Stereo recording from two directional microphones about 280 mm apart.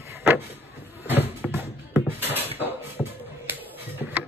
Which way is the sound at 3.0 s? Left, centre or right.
Centre.